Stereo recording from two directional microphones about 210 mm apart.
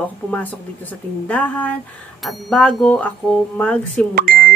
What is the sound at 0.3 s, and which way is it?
Speech, 10° left (ahead or behind).